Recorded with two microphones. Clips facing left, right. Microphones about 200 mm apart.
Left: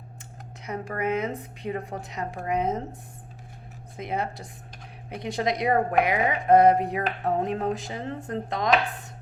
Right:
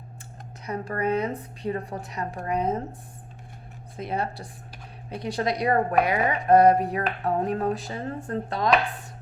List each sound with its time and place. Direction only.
0.6 s a woman's voice: 20° left (ahead or behind)
3.9 s a woman's voice: 20° left (ahead or behind)